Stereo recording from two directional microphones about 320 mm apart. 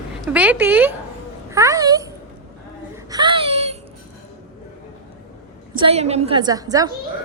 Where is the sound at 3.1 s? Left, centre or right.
Centre.